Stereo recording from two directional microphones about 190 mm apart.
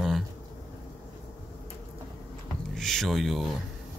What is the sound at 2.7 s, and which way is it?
Speech, centre (ahead or behind).